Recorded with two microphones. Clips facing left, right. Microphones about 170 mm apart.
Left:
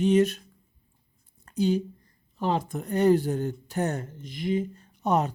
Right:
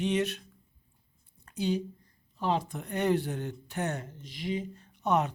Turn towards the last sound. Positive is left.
turn(degrees=40)  # may be behind; listen again after turning